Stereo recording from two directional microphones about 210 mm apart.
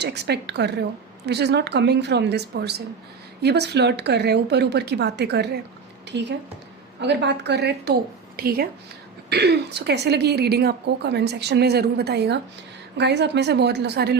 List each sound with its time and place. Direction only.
0.0 s a woman's voice: 50° right (ahead or behind)